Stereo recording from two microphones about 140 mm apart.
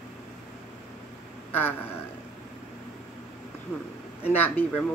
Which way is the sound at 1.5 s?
15° left (ahead or behind).